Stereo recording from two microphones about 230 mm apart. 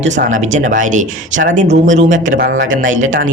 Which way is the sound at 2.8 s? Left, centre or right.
Right.